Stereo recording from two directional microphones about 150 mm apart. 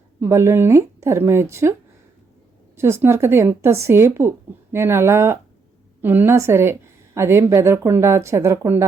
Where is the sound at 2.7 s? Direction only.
15° right (ahead or behind).